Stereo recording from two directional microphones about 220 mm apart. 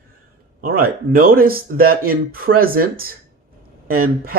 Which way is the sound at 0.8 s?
40° right (ahead or behind).